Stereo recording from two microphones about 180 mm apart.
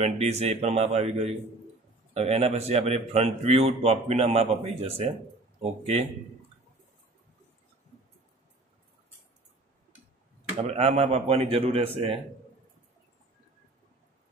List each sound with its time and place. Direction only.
0.0 s a man's voice: 35° right (ahead or behind)
10.6 s a man's voice: 35° right (ahead or behind)